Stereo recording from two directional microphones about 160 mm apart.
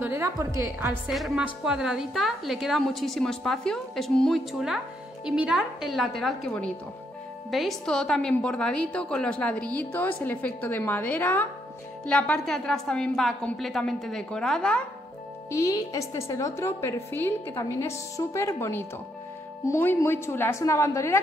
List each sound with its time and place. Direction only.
0.0 s a woman's voice: 15° right (ahead or behind)
1.1 s a woman's voice: 5° right (ahead or behind)
15.5 s a woman's voice: 20° left (ahead or behind)